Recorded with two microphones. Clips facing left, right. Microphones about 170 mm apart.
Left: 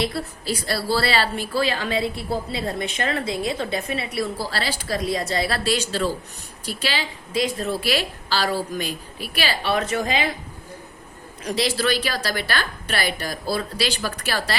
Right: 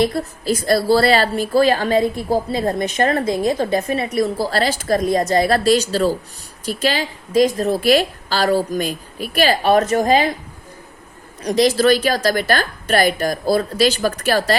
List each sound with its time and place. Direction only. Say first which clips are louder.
0.0 s speech: right 7 dB; 45° right (ahead or behind)
11.4 s speech: right 8 dB; 45° right (ahead or behind)